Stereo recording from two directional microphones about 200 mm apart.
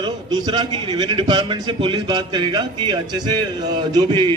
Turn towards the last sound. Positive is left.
turn(degrees=-20)  # may be behind; listen again after turning